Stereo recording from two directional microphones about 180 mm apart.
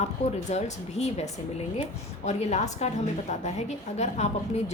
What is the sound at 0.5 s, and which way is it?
A woman's voice, 35° left (ahead or behind).